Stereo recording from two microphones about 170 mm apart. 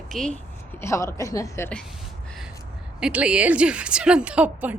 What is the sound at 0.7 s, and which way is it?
Speech, 15° left (ahead or behind).